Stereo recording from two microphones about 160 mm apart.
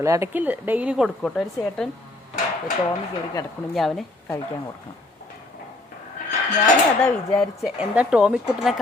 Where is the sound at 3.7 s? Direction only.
Centre (ahead or behind).